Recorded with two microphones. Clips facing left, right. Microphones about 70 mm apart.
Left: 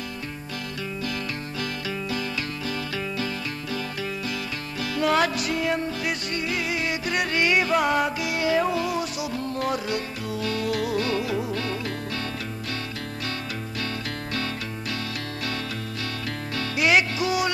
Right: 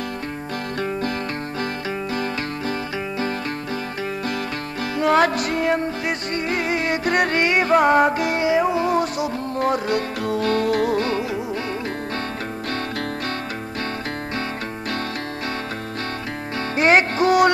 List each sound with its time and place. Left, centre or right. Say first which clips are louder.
4.9 s music: right 5 dB; right
8.5 s music: right 3 dB; right
8.8 s music: right 7 dB; right
9.9 s music: right 7 dB; right
16.5 s music: right 5 dB; right